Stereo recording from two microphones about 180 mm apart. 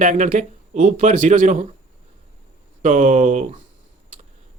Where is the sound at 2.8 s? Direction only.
45° right (ahead or behind).